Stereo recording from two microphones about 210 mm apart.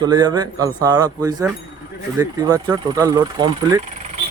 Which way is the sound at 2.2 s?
15° right (ahead or behind).